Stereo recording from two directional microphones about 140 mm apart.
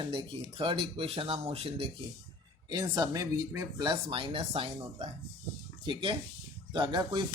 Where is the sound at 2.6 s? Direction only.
30° right (ahead or behind).